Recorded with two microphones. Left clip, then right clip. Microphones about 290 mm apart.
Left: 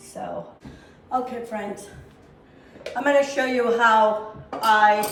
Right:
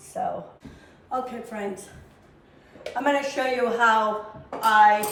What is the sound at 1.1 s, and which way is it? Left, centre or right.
Speech, centre.